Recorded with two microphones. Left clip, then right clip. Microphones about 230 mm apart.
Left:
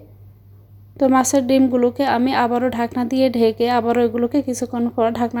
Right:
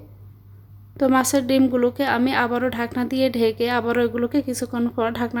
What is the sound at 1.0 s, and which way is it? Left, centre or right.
A woman's voice, centre.